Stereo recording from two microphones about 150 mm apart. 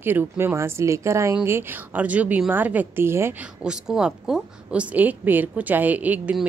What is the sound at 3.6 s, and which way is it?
A woman's voice, 5° right (ahead or behind).